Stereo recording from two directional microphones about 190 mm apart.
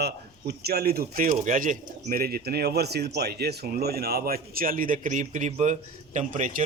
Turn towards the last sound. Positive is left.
turn(degrees=-40)  # may be behind; listen again after turning